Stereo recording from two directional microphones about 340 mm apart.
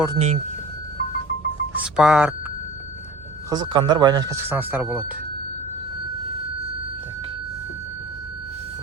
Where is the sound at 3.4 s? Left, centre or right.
Centre.